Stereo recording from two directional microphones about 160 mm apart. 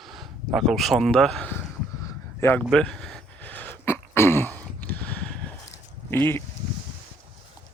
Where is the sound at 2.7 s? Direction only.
5° left (ahead or behind).